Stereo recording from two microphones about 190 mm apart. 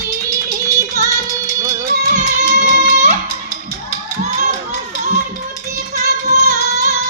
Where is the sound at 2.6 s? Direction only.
45° right (ahead or behind).